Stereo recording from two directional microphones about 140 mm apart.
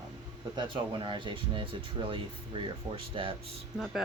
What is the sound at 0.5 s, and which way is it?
Speech, 35° right (ahead or behind).